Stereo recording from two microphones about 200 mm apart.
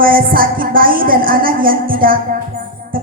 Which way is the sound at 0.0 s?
45° right (ahead or behind).